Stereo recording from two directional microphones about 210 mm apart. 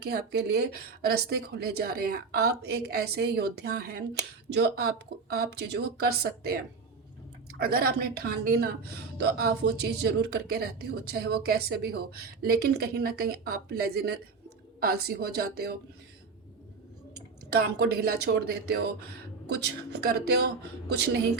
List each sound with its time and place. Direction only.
0.0 s speech: 50° right (ahead or behind)
7.6 s speech: 50° right (ahead or behind)
17.5 s speech: 50° right (ahead or behind)